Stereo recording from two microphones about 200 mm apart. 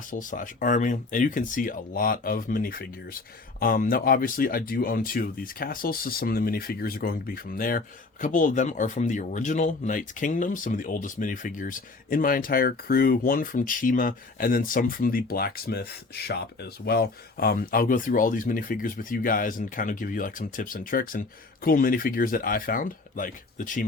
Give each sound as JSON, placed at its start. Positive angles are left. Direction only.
{"t": 0.1, "sound": "speech", "side_deg": 40}